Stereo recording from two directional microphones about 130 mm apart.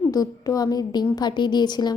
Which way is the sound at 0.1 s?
30° left (ahead or behind).